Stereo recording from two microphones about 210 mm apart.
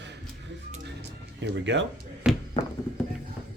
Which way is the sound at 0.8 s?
55° right (ahead or behind).